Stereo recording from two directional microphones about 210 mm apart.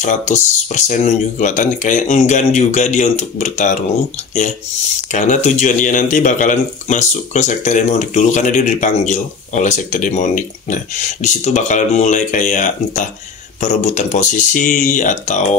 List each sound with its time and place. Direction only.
0.0 s a man's voice: 35° left (ahead or behind)
5.1 s a man's voice: 35° left (ahead or behind)